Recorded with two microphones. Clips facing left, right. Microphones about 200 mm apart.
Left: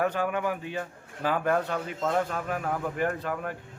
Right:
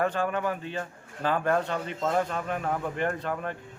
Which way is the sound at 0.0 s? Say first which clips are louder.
Even; 10° left (ahead or behind).